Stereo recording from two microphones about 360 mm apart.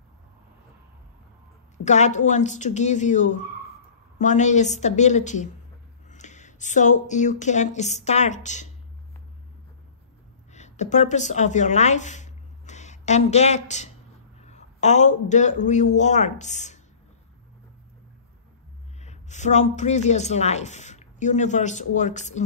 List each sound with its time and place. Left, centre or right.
1.9 s a woman's voice: centre
10.5 s a man's voice: centre
18.9 s speech: centre